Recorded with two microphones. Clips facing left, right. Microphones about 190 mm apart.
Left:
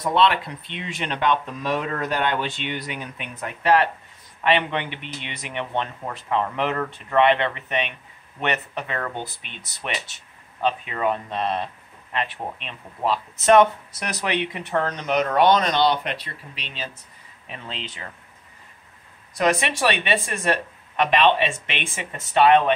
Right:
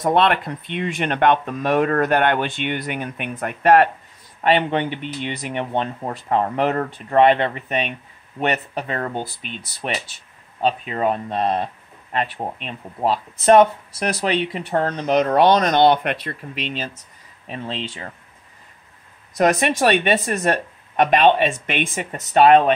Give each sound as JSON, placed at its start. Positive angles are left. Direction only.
{"t": 0.0, "sound": "speech", "side_deg": -55}
{"t": 4.4, "sound": "speech", "side_deg": -40}
{"t": 17.5, "sound": "speech", "side_deg": -35}
{"t": 19.3, "sound": "speech", "side_deg": -45}